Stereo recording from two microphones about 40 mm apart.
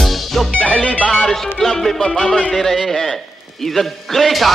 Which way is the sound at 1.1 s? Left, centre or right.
Centre.